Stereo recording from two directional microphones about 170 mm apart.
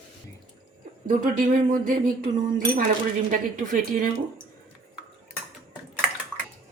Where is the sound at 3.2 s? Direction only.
50° right (ahead or behind).